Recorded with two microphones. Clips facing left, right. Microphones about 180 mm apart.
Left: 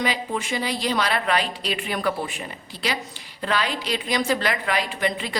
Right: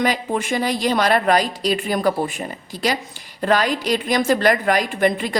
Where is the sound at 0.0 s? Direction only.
50° right (ahead or behind).